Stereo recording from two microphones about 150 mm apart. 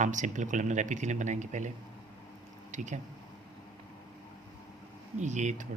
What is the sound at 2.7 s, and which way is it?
Speech, 55° right (ahead or behind).